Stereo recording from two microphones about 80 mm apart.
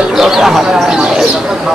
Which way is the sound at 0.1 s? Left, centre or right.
Centre.